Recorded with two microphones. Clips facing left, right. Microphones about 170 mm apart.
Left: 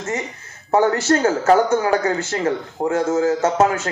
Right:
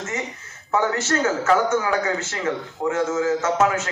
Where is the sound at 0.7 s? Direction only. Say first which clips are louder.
Left 6 dB; 30° left (ahead or behind).